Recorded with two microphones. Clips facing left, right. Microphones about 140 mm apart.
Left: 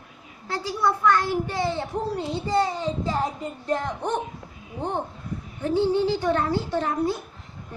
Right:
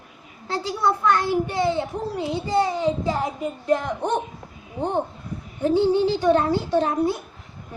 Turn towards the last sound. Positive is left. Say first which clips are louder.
# right 4 dB
turn(degrees=-20)  # may be behind; listen again after turning